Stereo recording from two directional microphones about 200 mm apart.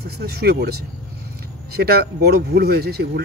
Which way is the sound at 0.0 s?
55° right (ahead or behind).